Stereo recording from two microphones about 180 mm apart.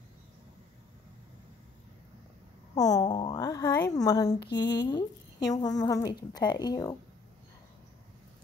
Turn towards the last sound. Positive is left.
turn(degrees=20)  # may be behind; listen again after turning